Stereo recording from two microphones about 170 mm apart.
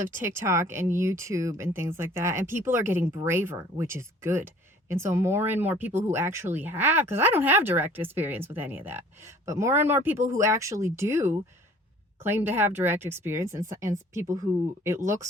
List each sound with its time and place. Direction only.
0.2 s speech: 15° right (ahead or behind)